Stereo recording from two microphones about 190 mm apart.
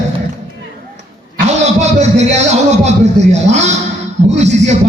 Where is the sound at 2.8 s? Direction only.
35° right (ahead or behind).